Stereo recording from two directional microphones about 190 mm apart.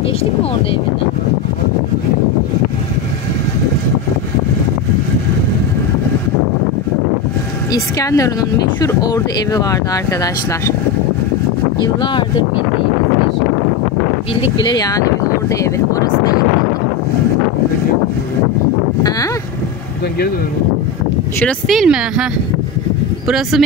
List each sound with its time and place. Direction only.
7.7 s a woman's voice: 15° left (ahead or behind)
14.3 s speech: 25° left (ahead or behind)
21.4 s speech: 5° left (ahead or behind)
23.2 s speech: centre (ahead or behind)